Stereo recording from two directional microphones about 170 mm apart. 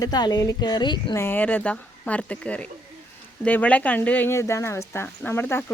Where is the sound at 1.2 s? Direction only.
10° left (ahead or behind).